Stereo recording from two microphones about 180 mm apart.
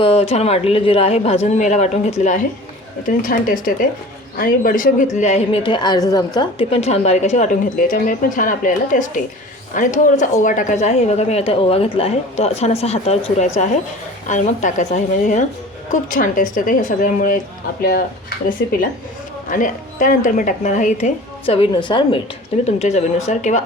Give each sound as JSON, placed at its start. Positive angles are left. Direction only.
{"t": 0.0, "sound": "a woman's voice", "side_deg": 35}
{"t": 19.5, "sound": "speech", "side_deg": 45}
{"t": 21.4, "sound": "speech", "side_deg": 30}
{"t": 22.6, "sound": "a woman's voice", "side_deg": 35}